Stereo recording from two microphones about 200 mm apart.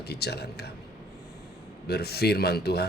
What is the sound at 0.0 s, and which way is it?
Speech, 55° left (ahead or behind).